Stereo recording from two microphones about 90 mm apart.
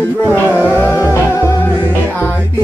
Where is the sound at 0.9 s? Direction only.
30° left (ahead or behind).